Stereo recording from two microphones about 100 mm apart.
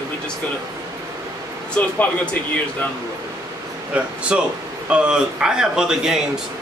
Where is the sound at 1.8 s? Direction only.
15° left (ahead or behind).